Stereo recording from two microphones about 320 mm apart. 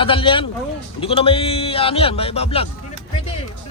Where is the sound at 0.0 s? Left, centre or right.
Centre.